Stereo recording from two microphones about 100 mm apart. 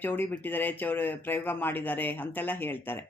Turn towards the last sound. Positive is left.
turn(degrees=20)  # may be behind; listen again after turning